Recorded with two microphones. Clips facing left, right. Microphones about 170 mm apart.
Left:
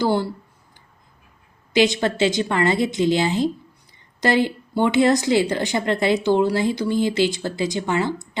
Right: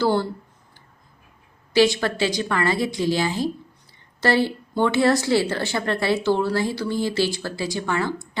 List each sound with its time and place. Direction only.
0.0 s speech: 15° left (ahead or behind)
1.7 s a woman's voice: 20° left (ahead or behind)